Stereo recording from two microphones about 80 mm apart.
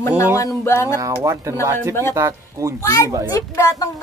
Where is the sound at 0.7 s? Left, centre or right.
Left.